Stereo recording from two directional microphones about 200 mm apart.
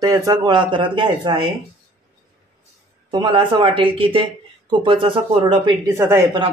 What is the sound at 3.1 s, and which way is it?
A man's voice, 25° right (ahead or behind).